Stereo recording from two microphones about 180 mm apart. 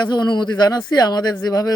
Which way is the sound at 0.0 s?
25° left (ahead or behind).